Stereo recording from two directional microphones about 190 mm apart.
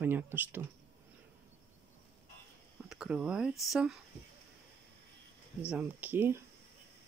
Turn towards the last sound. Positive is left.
turn(degrees=-10)  # may be behind; listen again after turning